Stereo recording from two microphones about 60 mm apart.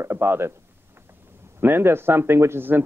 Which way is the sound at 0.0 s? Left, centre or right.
Right.